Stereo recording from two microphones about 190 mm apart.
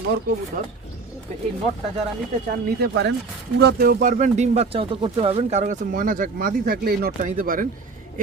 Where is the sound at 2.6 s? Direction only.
60° right (ahead or behind).